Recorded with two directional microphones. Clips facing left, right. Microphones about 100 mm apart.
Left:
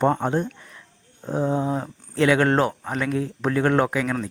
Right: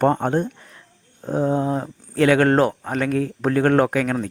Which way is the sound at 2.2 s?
40° right (ahead or behind).